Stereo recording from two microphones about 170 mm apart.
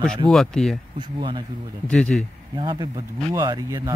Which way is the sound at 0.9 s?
25° right (ahead or behind).